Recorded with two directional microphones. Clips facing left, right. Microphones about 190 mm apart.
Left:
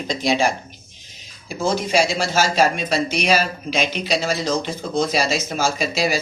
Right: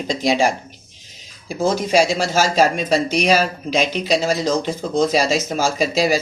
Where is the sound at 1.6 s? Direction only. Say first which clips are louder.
Right 3 dB; 40° right (ahead or behind).